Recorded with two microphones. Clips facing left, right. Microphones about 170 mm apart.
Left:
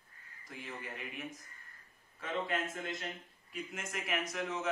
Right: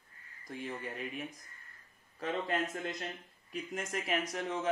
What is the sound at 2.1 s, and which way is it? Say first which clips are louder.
Speech: right 2 dB; 40° right (ahead or behind).